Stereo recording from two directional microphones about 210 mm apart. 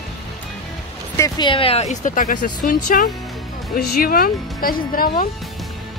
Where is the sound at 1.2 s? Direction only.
20° left (ahead or behind); by 2.7 s 40° left (ahead or behind).